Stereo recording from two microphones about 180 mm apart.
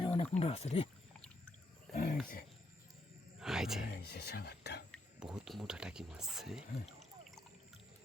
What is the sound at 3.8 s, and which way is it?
Speech, 60° left (ahead or behind).